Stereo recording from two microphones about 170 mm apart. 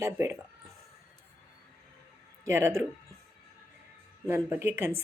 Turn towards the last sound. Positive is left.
turn(degrees=-15)  # may be behind; listen again after turning